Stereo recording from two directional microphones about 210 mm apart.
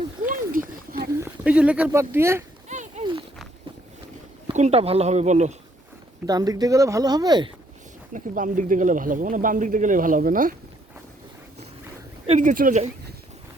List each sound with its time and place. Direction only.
0.2 s a sound: 40° right (ahead or behind)
1.2 s speech: 5° right (ahead or behind)
2.6 s clip-clop: 35° right (ahead or behind)
3.0 s a sound: 25° right (ahead or behind)
4.4 s speech: 30° right (ahead or behind)
6.2 s speech: 20° right (ahead or behind)
8.1 s speech: 40° right (ahead or behind)
12.2 s speech: 35° right (ahead or behind)